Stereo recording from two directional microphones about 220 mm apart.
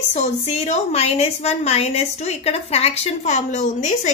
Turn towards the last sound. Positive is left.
turn(degrees=35)  # may be behind; listen again after turning